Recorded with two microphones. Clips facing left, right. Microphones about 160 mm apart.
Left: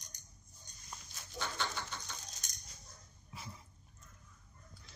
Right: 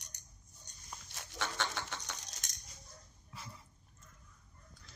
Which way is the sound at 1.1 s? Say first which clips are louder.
Right 2 dB; 75° right (ahead or behind).